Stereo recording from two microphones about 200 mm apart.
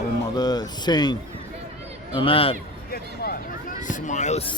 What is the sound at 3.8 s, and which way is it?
Speech, 40° left (ahead or behind).